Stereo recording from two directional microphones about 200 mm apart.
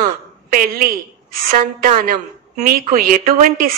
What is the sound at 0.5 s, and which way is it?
A woman's voice, 45° right (ahead or behind).